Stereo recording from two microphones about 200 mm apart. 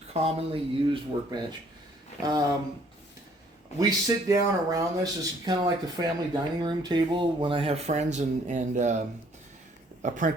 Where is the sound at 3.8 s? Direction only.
15° right (ahead or behind); by 8.9 s 35° right (ahead or behind).